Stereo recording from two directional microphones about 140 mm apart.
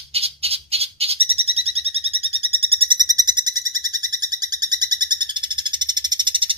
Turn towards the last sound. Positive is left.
turn(degrees=-35)  # may be behind; listen again after turning